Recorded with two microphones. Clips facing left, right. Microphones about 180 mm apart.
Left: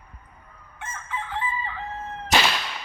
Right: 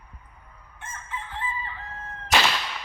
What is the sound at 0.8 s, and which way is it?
Chicken, 90° left.